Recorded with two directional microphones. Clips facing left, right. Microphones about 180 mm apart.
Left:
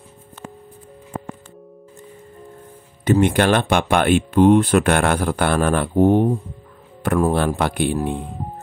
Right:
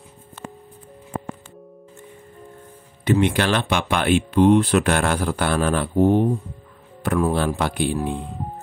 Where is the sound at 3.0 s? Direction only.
45° left (ahead or behind).